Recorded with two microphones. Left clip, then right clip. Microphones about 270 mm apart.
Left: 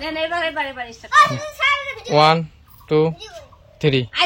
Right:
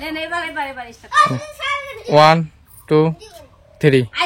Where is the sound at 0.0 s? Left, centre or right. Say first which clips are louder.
Left 2 dB; centre.